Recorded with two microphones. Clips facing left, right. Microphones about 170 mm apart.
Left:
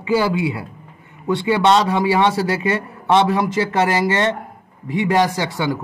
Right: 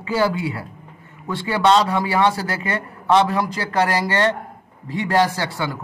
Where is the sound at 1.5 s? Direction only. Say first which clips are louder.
Left 1 dB; 20° left (ahead or behind).